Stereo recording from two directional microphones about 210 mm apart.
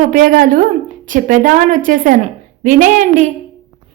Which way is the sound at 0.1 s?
40° right (ahead or behind).